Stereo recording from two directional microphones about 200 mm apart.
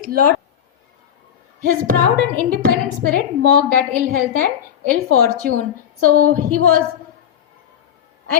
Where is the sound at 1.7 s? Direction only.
45° right (ahead or behind).